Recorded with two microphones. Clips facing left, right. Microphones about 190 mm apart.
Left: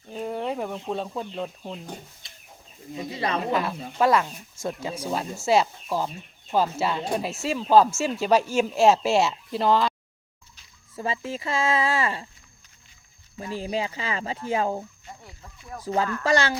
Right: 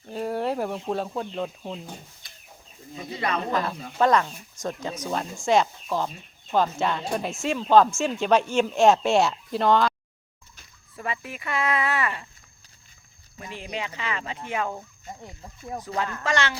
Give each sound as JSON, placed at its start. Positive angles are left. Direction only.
{"t": 0.1, "sound": "speech", "side_deg": -5}
{"t": 3.2, "sound": "speech", "side_deg": 30}
{"t": 3.6, "sound": "speech", "side_deg": 5}
{"t": 10.9, "sound": "speech", "side_deg": 25}
{"t": 13.4, "sound": "speech", "side_deg": 30}
{"t": 15.9, "sound": "speech", "side_deg": 35}